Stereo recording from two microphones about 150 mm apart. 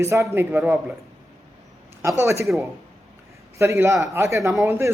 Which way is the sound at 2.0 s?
15° right (ahead or behind).